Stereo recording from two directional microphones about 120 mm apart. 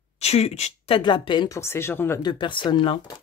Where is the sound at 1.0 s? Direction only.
40° left (ahead or behind).